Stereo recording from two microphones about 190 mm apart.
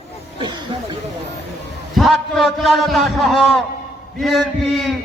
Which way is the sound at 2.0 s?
Centre (ahead or behind).